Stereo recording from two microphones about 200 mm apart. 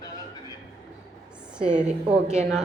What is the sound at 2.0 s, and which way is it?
Speech, 35° right (ahead or behind).